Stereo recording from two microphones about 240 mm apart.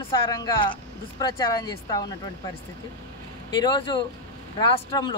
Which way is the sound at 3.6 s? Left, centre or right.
Centre.